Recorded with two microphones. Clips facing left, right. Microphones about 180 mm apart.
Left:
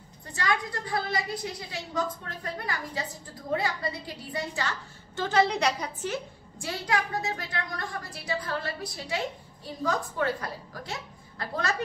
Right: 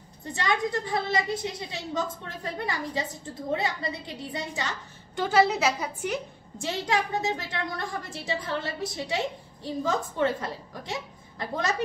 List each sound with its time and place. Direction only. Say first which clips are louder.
0.2 s a woman's voice: right 2 dB; 20° right (ahead or behind)
6.6 s a woman's voice: right 2 dB; 25° right (ahead or behind)